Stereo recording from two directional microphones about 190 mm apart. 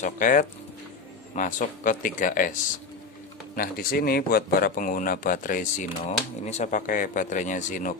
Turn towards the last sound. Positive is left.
turn(degrees=45)  # may be behind; listen again after turning